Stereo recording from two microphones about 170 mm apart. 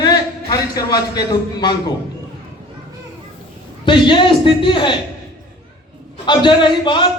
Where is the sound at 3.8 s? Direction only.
30° left (ahead or behind).